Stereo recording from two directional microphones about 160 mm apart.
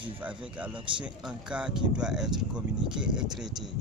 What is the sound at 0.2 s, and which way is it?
Speech, 10° right (ahead or behind).